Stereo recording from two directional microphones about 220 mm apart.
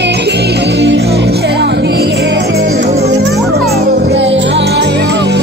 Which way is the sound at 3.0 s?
50° right (ahead or behind).